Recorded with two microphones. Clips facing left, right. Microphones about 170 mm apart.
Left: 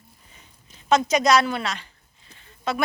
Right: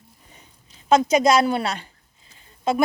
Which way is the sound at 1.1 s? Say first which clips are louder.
Right 2 dB; 30° right (ahead or behind).